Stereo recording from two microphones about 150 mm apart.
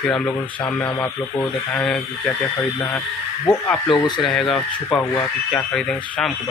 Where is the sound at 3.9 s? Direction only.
30° left (ahead or behind).